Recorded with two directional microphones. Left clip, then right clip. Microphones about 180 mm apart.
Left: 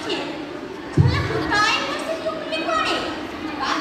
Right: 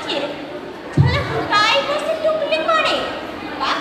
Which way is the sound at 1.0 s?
25° right (ahead or behind).